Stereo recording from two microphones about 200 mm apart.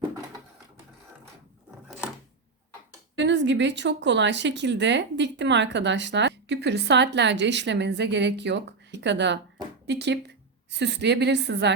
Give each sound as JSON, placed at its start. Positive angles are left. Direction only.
{"t": 3.2, "sound": "a woman's voice", "side_deg": -60}